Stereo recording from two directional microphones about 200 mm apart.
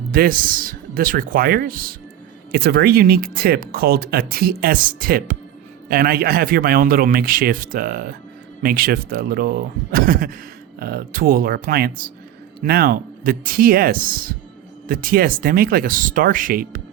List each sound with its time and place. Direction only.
0.1 s speech: 45° right (ahead or behind)